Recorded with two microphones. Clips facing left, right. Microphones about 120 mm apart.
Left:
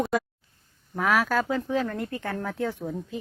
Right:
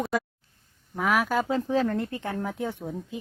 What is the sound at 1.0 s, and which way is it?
Speech, 10° right (ahead or behind).